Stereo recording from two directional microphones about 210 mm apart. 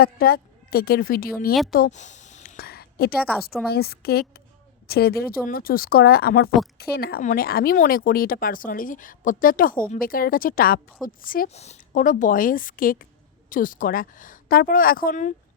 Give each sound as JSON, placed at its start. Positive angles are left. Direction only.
{"t": 0.0, "sound": "a woman's voice", "side_deg": 45}